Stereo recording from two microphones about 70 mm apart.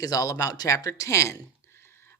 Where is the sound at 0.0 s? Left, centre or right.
Left.